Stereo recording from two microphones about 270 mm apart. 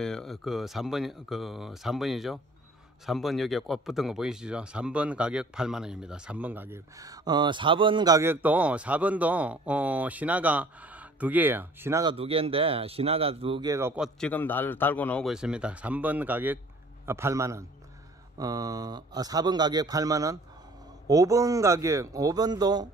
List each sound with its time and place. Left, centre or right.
0.0 s speech: centre